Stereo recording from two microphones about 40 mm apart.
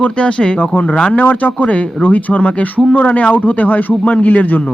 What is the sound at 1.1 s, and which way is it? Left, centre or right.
Speech, left.